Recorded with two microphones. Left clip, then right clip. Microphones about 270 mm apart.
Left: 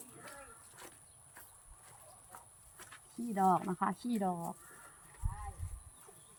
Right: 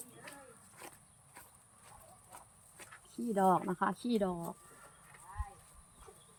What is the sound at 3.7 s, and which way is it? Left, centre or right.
Speech, centre.